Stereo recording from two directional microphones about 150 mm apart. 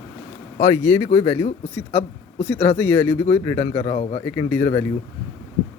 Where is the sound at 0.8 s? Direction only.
20° left (ahead or behind).